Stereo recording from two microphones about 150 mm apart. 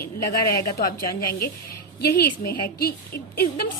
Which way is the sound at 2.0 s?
90° left.